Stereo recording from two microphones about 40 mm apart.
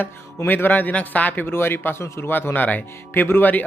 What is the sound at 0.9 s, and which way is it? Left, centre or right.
Speech, left.